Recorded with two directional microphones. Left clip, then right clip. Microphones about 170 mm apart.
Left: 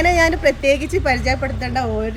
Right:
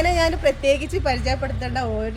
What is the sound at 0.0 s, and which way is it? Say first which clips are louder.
A woman's voice: left 4 dB; 10° left (ahead or behind).